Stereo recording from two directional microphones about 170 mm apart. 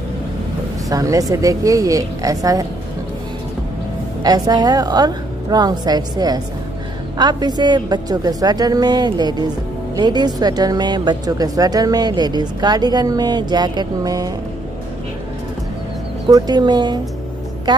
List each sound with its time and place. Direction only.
0.8 s speech: 20° right (ahead or behind)
4.2 s speech: 25° right (ahead or behind)
16.3 s speech: 20° right (ahead or behind)